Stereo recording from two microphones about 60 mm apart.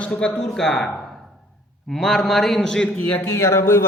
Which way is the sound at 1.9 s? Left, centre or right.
Centre.